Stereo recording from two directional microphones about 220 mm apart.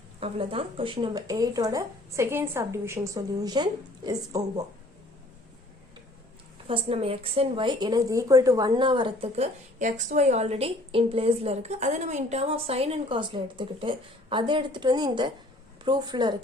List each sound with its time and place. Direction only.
0.2 s speech: 25° right (ahead or behind)
6.7 s a woman's voice: 25° right (ahead or behind)